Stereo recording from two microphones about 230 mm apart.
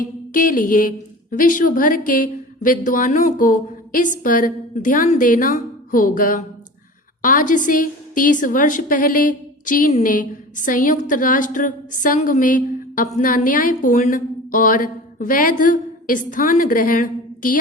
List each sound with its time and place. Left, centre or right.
0.0 s a woman's voice: left